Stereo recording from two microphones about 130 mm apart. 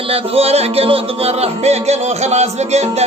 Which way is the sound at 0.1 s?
50° right (ahead or behind).